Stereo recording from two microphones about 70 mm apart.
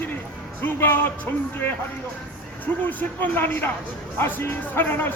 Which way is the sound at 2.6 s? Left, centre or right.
Left.